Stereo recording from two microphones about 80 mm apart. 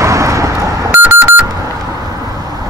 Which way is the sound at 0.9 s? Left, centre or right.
Right.